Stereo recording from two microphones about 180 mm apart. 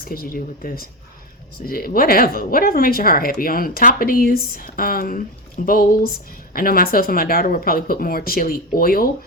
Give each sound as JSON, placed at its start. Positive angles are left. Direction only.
{"t": 0.0, "sound": "speech", "side_deg": 55}